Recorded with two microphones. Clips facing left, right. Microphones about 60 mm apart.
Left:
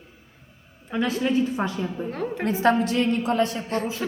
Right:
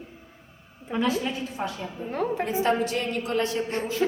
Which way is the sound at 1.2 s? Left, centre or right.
Left.